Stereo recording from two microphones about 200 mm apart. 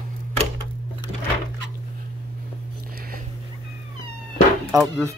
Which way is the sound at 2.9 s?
45° right (ahead or behind).